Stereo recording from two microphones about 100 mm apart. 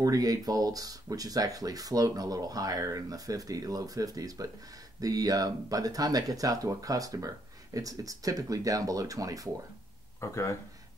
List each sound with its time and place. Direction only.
0.0 s speech: 40° right (ahead or behind)
10.2 s speech: 30° left (ahead or behind)